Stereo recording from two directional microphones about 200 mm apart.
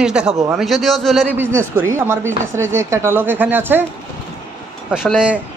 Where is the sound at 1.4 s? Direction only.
10° right (ahead or behind).